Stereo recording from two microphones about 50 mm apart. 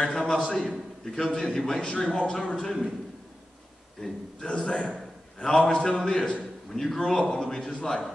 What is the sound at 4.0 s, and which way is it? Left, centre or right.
A man's voice, centre.